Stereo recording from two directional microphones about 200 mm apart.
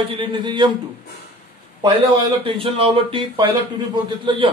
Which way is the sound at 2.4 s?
25° right (ahead or behind).